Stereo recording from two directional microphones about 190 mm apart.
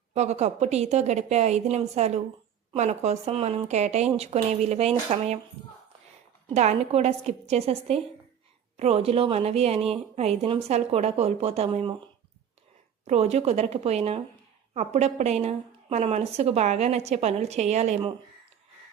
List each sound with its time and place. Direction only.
0.1 s a woman's voice: 35° right (ahead or behind)
6.5 s a woman's voice: 35° right (ahead or behind)
13.1 s a woman's voice: 35° right (ahead or behind)